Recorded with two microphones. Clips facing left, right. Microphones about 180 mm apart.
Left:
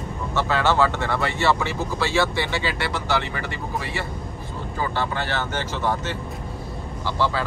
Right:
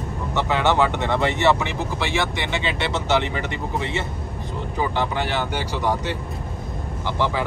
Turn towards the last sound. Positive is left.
turn(degrees=-15)  # may be behind; listen again after turning